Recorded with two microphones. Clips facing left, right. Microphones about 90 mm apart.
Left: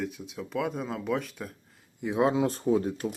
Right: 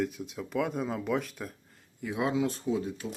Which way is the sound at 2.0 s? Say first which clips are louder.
Left 4 dB; 30° left (ahead or behind).